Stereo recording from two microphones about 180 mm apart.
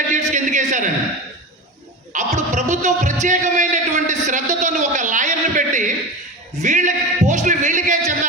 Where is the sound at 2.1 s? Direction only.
45° right (ahead or behind).